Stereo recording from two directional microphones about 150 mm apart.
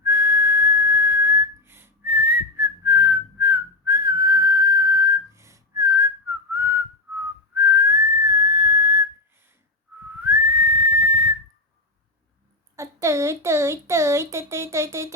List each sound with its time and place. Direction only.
0.0 s whistle: 15° right (ahead or behind)
10.8 s whistle: 15° right (ahead or behind)
12.7 s a sound: 20° right (ahead or behind)